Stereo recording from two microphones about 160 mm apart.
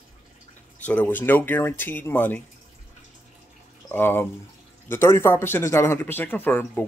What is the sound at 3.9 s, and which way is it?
Speech, 15° left (ahead or behind).